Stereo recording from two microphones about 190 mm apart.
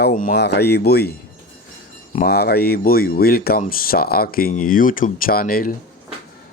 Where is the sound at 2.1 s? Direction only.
55° left (ahead or behind).